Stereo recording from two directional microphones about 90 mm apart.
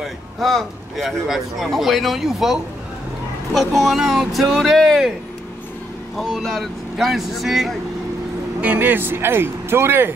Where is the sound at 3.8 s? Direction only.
Centre (ahead or behind).